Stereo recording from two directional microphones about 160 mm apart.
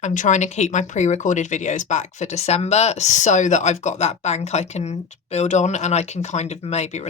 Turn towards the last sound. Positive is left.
turn(degrees=45)  # may be behind; listen again after turning